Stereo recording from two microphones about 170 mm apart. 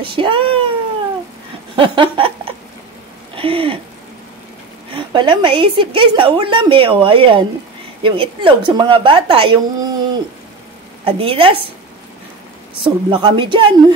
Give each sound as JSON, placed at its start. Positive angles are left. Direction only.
{"t": 0.0, "sound": "cat", "side_deg": -30}
{"t": 1.8, "sound": "a sound", "side_deg": -30}
{"t": 4.9, "sound": "a woman's voice", "side_deg": -30}
{"t": 12.8, "sound": "a woman's voice", "side_deg": -30}